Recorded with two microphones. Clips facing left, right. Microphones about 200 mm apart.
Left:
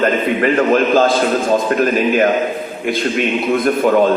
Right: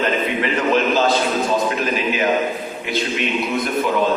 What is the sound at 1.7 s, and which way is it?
Mantra, 50° left (ahead or behind).